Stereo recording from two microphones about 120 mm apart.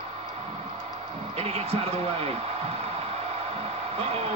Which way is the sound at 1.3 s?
55° right (ahead or behind).